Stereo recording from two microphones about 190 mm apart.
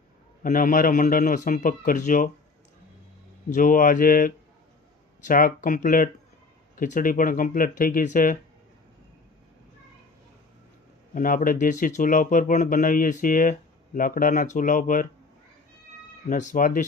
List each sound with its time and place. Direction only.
0.4 s speech: 45° left (ahead or behind)
3.5 s speech: 45° left (ahead or behind)
11.1 s speech: 45° left (ahead or behind)
16.3 s speech: 45° left (ahead or behind)